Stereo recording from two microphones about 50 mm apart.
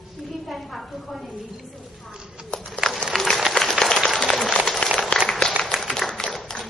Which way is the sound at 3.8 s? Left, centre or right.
Centre.